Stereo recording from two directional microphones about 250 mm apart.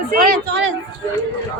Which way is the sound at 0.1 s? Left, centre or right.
Right.